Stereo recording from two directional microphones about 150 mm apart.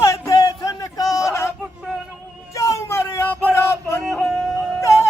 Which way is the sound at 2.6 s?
20° left (ahead or behind).